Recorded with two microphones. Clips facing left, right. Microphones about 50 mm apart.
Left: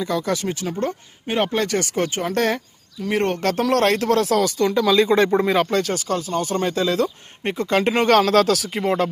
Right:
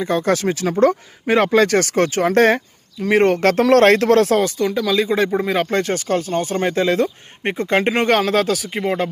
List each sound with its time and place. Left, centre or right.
0.0 s speech: right
0.3 s speech: right
1.5 s speech: right
2.3 s speech: right
4.6 s speech: centre
5.9 s speech: right; by 9.0 s centre